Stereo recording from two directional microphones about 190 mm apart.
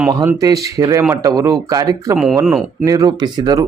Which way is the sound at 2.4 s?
Centre (ahead or behind).